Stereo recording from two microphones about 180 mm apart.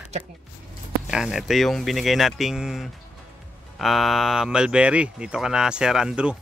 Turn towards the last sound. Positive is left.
turn(degrees=-5)  # may be behind; listen again after turning